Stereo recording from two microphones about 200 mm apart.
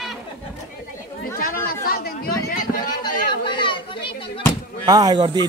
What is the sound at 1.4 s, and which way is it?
Speech, 45° left (ahead or behind).